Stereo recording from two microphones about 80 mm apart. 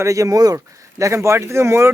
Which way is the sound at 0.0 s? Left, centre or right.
Right.